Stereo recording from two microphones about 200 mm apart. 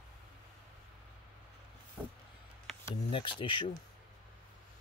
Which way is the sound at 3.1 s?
25° left (ahead or behind).